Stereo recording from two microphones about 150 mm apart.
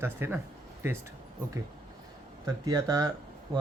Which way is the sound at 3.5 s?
25° right (ahead or behind).